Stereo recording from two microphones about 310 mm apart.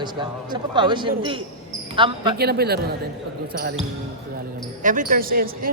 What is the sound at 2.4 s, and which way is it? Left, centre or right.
Speech, right.